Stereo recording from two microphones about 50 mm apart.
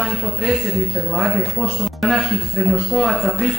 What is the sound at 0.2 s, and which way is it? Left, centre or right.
A man's voice, centre.